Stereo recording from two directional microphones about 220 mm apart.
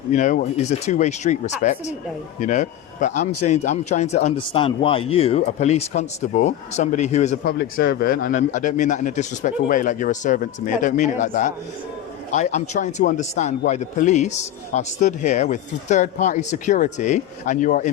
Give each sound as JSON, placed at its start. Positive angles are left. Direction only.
{"t": 0.1, "sound": "a man's voice", "side_deg": 35}